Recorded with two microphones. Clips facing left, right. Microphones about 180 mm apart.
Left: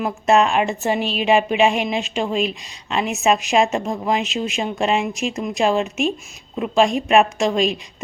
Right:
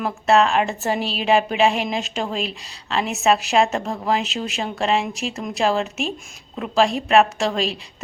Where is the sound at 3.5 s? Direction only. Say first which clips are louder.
Left 1 dB; 10° left (ahead or behind).